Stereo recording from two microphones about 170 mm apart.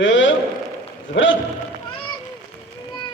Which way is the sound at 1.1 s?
90° left.